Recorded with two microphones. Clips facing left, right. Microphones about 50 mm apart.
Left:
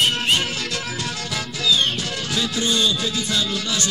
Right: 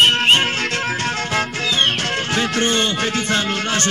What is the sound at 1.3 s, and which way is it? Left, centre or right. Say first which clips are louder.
Speech: right 2 dB; right.